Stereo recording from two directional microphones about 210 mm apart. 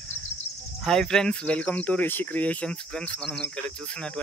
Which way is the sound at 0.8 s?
5° left (ahead or behind).